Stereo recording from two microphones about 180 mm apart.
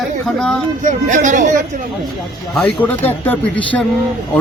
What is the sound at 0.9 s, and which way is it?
Speech, 45° right (ahead or behind).